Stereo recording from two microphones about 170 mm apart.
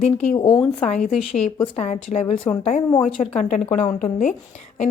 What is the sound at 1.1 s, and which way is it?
Speech, 5° left (ahead or behind).